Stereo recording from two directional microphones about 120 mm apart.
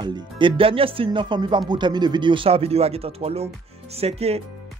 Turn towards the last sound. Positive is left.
turn(degrees=-60)  # may be behind; listen again after turning